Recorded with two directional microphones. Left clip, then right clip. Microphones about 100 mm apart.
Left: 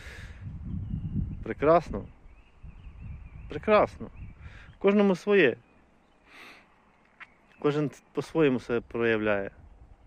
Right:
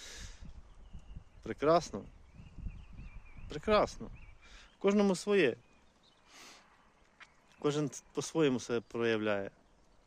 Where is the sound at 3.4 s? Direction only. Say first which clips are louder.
Left 7 dB; 25° right (ahead or behind).